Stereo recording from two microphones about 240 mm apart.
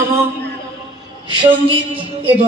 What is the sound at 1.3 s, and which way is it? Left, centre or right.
A woman's voice, right.